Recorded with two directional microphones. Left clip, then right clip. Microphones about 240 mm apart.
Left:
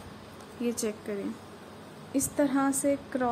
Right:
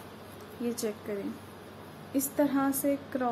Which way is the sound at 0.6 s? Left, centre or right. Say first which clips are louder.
Left 2 dB; left.